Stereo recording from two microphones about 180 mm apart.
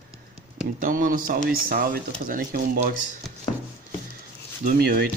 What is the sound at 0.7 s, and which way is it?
Speech, 50° right (ahead or behind).